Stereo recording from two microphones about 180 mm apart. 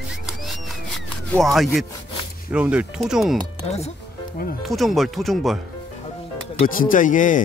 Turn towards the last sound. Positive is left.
turn(degrees=45)  # may be behind; listen again after turning